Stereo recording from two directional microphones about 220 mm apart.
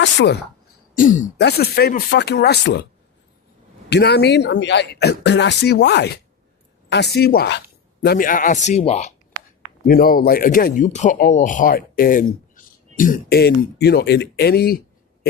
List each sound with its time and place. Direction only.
0.0 s a woman's voice: 55° left (ahead or behind)
0.9 s a man's voice: 35° left (ahead or behind)
1.4 s speech: 45° left (ahead or behind)
3.8 s a man's voice: 50° left (ahead or behind); by 9.1 s 30° left (ahead or behind)
9.8 s a man's voice: 40° left (ahead or behind)